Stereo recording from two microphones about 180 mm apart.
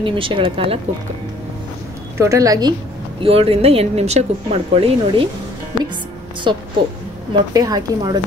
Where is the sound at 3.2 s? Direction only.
30° right (ahead or behind).